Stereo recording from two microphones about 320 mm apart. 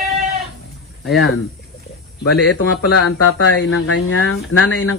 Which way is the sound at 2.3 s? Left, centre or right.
Left.